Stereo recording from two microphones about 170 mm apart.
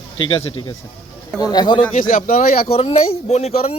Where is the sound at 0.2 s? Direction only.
30° left (ahead or behind).